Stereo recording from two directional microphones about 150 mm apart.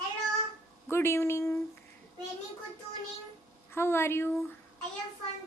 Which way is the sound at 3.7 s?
15° left (ahead or behind).